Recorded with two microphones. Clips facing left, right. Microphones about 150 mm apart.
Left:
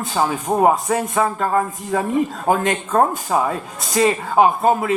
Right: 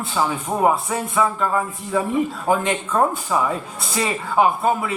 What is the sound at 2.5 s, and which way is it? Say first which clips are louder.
A man's voice: left 3 dB; 45° left (ahead or behind).